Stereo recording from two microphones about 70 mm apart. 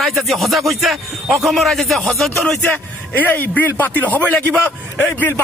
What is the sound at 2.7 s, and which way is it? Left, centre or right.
A man's voice, left.